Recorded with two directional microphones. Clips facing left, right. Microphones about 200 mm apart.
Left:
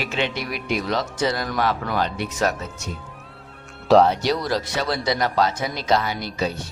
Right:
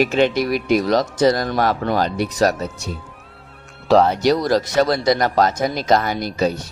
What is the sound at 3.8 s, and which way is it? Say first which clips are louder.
Speech: right 1 dB; centre (ahead or behind).